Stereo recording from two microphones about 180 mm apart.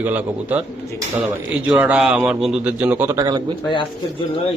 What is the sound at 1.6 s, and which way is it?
A man's voice, 10° right (ahead or behind).